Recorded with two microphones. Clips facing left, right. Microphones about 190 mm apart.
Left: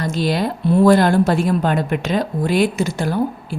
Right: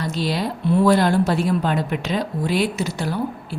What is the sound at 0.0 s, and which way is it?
A woman's voice, 50° left (ahead or behind).